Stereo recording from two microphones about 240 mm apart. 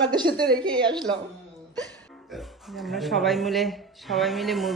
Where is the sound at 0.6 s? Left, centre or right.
Centre.